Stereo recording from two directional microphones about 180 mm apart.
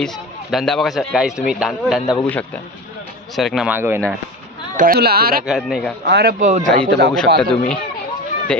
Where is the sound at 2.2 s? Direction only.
10° left (ahead or behind).